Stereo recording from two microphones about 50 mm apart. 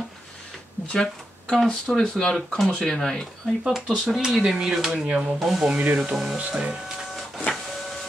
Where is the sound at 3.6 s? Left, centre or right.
Centre.